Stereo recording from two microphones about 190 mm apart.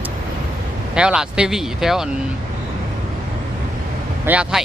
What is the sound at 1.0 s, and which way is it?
Speech, 5° right (ahead or behind).